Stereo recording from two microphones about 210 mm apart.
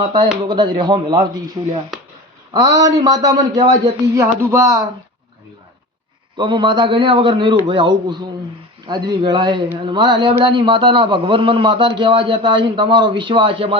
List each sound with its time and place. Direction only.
0.0 s a man's voice: 20° right (ahead or behind)
6.3 s a man's voice: 20° right (ahead or behind)